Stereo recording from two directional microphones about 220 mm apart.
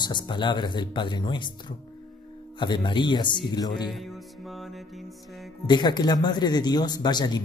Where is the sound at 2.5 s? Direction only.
20° left (ahead or behind).